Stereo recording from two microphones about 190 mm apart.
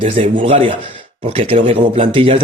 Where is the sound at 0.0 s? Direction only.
30° right (ahead or behind).